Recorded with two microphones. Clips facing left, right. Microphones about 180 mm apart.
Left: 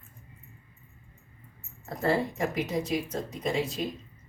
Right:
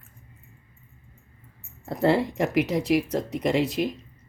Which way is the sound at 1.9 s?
75° right (ahead or behind).